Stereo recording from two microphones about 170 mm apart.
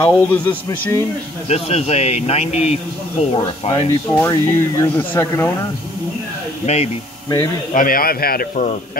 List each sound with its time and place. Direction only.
0.0 s speech: 15° left (ahead or behind)
1.5 s speech: 40° left (ahead or behind)
4.1 s speech: 15° left (ahead or behind)
6.6 s speech: 40° left (ahead or behind)
7.7 s speech: 55° left (ahead or behind)